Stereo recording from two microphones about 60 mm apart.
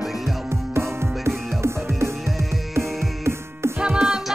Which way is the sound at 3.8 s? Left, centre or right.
Centre.